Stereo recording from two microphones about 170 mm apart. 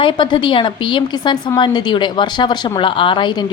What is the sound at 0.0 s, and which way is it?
A woman's voice, 30° left (ahead or behind).